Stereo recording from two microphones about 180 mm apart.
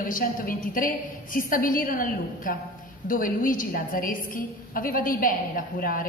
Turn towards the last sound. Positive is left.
turn(degrees=50)  # may be behind; listen again after turning